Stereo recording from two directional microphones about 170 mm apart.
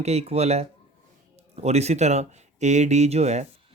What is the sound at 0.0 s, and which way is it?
Speech, 40° right (ahead or behind).